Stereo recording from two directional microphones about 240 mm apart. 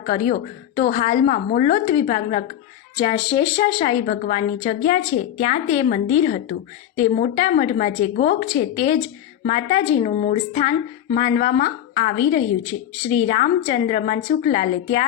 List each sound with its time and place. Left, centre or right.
0.0 s a woman's voice: left
8.7 s a woman's voice: left
13.2 s a woman's voice: left